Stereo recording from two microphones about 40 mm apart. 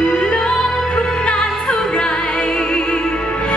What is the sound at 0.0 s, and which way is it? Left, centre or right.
Music, left.